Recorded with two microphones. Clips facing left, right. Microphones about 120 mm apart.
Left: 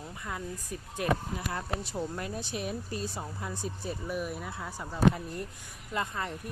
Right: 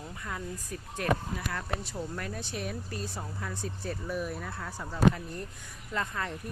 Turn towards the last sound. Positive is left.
turn(degrees=15)  # may be behind; listen again after turning